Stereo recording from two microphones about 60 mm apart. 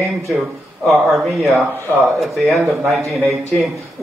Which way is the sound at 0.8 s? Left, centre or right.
Centre.